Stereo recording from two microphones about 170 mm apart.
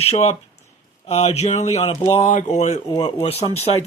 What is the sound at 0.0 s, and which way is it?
A man's voice, 35° left (ahead or behind).